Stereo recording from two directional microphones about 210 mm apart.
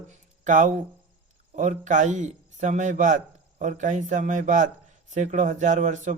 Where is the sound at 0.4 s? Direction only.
35° right (ahead or behind).